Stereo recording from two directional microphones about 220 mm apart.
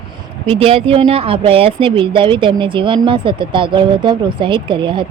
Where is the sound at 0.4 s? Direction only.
25° right (ahead or behind).